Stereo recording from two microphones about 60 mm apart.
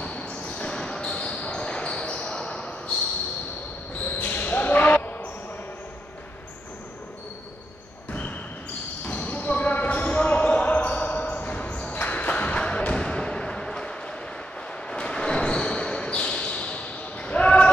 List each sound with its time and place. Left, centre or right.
0.0 s basketball bounce: left
4.0 s basketball bounce: left
8.1 s basketball bounce: left
14.9 s a sound: centre